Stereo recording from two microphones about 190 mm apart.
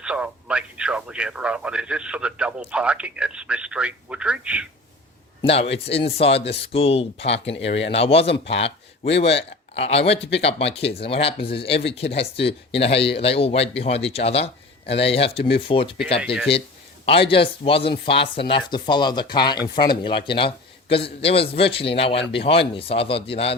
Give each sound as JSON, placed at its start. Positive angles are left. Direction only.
{"t": 0.0, "sound": "speech", "side_deg": -5}
{"t": 5.4, "sound": "speech", "side_deg": 30}
{"t": 17.1, "sound": "speech", "side_deg": 30}